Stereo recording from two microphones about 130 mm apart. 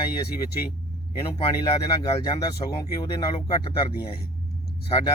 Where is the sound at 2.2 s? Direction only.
30° left (ahead or behind).